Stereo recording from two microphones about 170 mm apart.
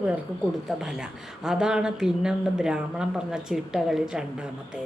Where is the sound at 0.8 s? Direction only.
5° right (ahead or behind).